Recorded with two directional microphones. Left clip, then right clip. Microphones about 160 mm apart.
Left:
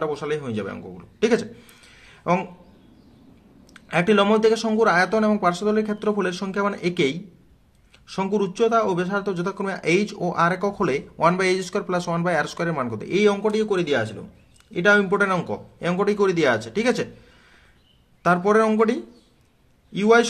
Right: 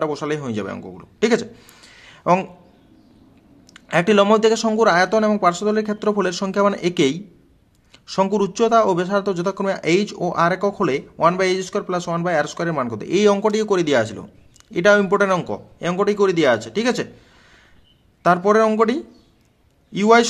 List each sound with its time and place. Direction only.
0.0 s a man's voice: 35° right (ahead or behind)
3.7 s a man's voice: 30° right (ahead or behind)
18.2 s a man's voice: 25° right (ahead or behind)